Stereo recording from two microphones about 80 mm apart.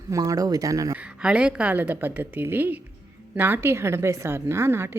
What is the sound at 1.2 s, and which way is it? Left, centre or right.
A woman's voice, centre.